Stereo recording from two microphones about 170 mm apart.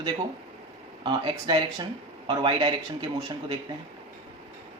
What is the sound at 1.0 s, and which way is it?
Speech, 25° right (ahead or behind).